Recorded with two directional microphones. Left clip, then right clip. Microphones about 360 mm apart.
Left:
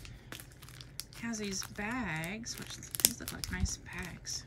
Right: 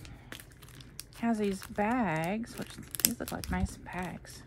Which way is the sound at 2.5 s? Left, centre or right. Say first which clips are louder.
Right 1 dB; centre.